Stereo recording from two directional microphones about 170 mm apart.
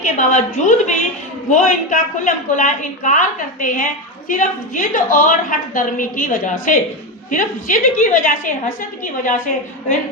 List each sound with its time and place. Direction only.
0.0 s a woman's voice: 45° left (ahead or behind)